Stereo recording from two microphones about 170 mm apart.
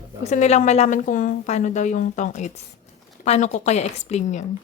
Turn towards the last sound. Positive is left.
turn(degrees=40)  # may be behind; listen again after turning